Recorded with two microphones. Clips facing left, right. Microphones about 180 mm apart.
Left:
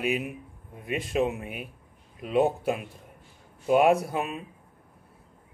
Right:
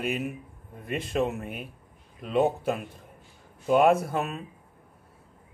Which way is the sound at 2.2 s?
5° left (ahead or behind).